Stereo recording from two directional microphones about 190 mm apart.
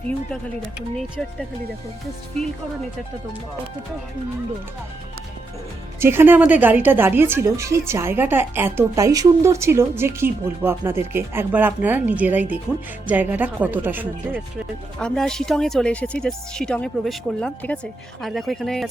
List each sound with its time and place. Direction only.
6.0 s a woman's voice: 10° right (ahead or behind)
14.9 s speech: 5° left (ahead or behind)